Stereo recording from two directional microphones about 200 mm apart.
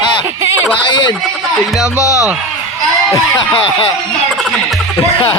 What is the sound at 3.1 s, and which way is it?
Speech, 20° left (ahead or behind).